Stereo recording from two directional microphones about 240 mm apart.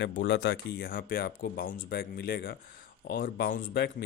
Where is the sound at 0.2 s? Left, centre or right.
Left.